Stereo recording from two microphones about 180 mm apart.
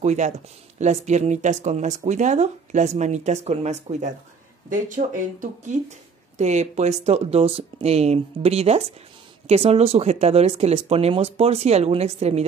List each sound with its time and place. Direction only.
0.0 s speech: 40° right (ahead or behind)